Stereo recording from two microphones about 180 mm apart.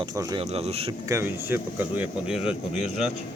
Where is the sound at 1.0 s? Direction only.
15° right (ahead or behind).